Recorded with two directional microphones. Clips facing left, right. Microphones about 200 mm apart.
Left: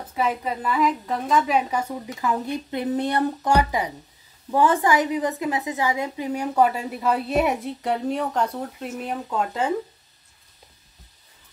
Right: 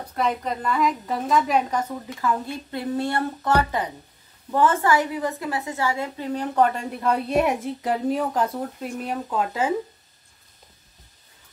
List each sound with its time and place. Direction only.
0.0 s a woman's voice: 5° left (ahead or behind)